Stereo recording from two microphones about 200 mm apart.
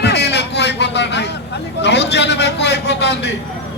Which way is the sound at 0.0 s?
60° left (ahead or behind).